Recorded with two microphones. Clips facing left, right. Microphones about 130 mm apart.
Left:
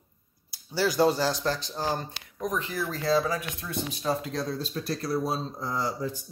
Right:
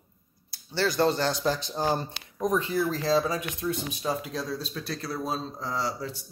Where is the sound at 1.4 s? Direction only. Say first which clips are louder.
Right 2 dB; 15° right (ahead or behind).